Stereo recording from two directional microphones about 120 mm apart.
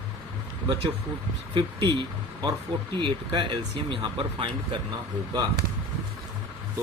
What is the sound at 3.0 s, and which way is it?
Speech, 45° right (ahead or behind).